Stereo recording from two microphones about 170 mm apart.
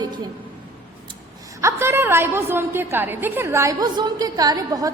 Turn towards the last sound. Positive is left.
turn(degrees=-20)  # may be behind; listen again after turning